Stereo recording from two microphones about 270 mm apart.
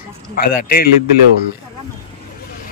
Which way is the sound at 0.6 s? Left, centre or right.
Left.